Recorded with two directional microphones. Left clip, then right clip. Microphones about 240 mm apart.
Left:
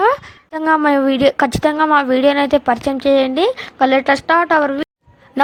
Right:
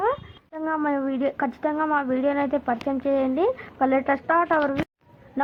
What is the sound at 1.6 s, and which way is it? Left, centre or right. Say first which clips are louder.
A woman's voice: left 10 dB; left.